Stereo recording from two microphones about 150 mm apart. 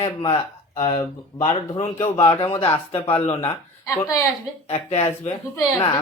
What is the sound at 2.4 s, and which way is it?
Speech, 40° left (ahead or behind).